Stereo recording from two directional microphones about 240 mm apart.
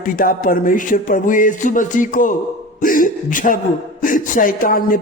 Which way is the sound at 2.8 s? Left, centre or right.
Left.